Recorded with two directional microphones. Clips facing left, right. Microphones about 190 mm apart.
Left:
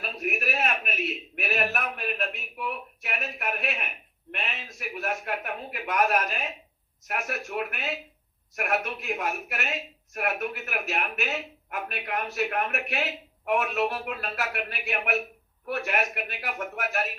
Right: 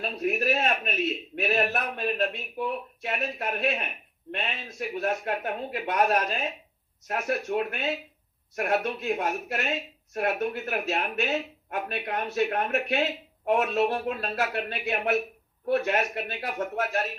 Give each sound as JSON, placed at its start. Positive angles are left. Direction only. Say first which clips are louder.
{"t": 0.0, "sound": "speech", "louder": "right 4 dB", "side_deg": -30}